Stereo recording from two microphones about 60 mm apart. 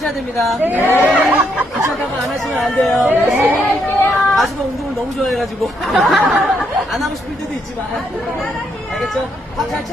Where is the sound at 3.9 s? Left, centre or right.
Left.